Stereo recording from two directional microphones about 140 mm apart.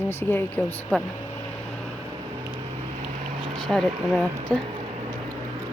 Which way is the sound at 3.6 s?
5° left (ahead or behind).